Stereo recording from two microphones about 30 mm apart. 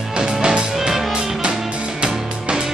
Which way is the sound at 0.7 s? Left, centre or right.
Centre.